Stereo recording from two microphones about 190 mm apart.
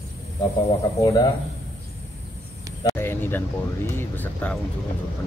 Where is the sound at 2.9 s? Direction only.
10° left (ahead or behind).